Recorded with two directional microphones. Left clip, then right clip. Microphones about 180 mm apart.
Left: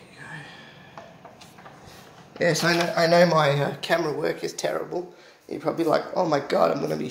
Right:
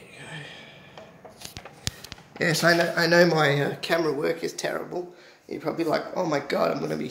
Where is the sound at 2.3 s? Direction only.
35° right (ahead or behind).